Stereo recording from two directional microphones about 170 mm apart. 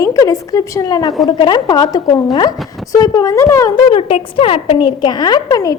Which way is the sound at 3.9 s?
35° left (ahead or behind).